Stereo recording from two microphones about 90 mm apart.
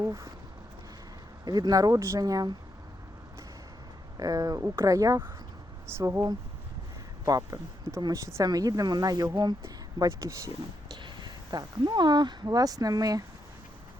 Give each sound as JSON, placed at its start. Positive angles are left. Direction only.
{"t": 0.0, "sound": "speech", "side_deg": -35}
{"t": 1.5, "sound": "speech", "side_deg": -45}
{"t": 4.2, "sound": "speech", "side_deg": -40}
{"t": 7.3, "sound": "speech", "side_deg": -40}
{"t": 10.0, "sound": "speech", "side_deg": -35}
{"t": 10.9, "sound": "speech", "side_deg": -55}